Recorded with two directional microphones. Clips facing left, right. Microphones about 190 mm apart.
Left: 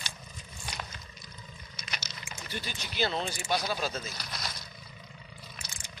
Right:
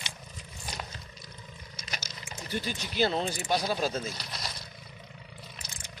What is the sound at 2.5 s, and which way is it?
Speech, 35° right (ahead or behind).